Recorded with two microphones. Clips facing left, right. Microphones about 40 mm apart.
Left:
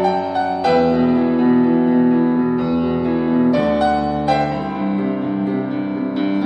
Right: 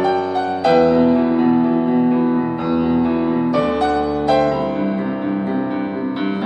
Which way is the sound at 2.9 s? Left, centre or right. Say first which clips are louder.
Right 1 dB; right.